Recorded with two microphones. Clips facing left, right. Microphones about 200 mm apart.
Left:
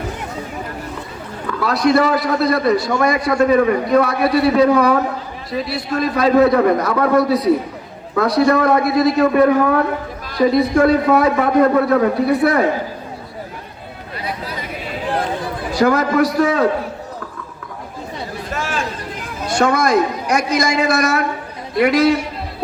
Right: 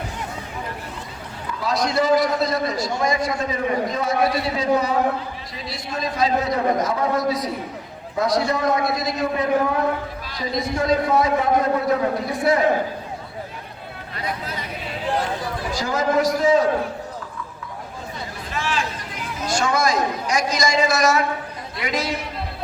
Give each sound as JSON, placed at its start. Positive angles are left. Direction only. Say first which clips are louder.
{"t": 1.5, "sound": "a man's voice", "louder": "left 7 dB", "side_deg": 65}
{"t": 15.7, "sound": "a man's voice", "louder": "left 6 dB", "side_deg": 65}
{"t": 18.5, "sound": "a sound", "louder": "left 2 dB", "side_deg": 45}
{"t": 19.4, "sound": "a man's voice", "louder": "left 5 dB", "side_deg": 60}